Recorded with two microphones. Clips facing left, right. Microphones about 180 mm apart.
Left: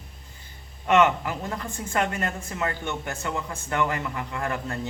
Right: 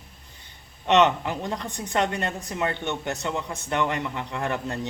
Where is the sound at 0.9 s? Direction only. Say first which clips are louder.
Right 1 dB; 25° right (ahead or behind).